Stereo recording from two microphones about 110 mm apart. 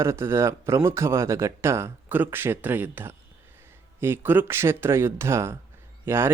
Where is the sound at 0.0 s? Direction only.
25° right (ahead or behind).